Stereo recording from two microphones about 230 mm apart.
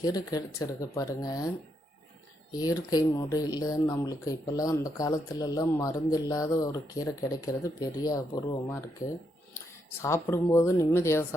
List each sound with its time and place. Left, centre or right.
0.0 s speech: centre
2.5 s speech: centre
9.0 s speech: left
10.0 s speech: centre